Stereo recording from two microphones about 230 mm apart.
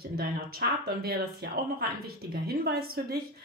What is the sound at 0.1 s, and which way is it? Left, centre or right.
Speech, right.